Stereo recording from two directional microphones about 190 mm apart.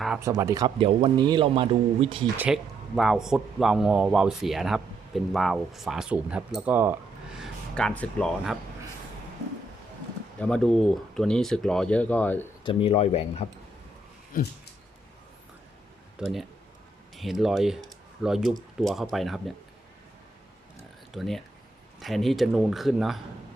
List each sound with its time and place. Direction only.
0.2 s speech: 15° right (ahead or behind)
0.8 s speech: 30° right (ahead or behind)
2.4 s speech: 5° right (ahead or behind)
10.4 s speech: 5° left (ahead or behind)
12.6 s speech: 30° left (ahead or behind)
14.3 s a sound: 45° left (ahead or behind)
16.1 s speech: centre (ahead or behind)
21.1 s speech: centre (ahead or behind)